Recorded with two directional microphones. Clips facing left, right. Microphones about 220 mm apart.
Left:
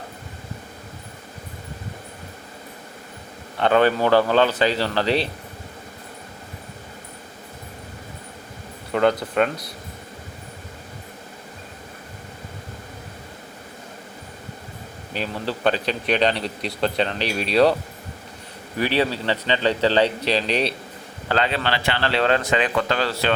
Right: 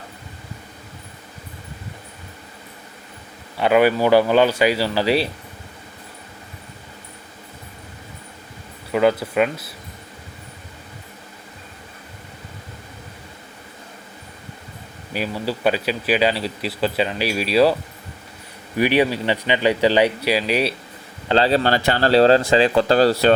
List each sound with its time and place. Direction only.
3.6 s speech: 10° right (ahead or behind)
8.9 s speech: 5° right (ahead or behind)
15.1 s speech: 10° right (ahead or behind)
18.8 s speech: 15° right (ahead or behind)
21.2 s speech: 30° right (ahead or behind)